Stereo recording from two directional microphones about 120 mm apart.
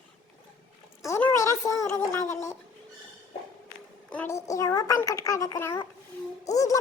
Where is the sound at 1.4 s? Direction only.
25° left (ahead or behind).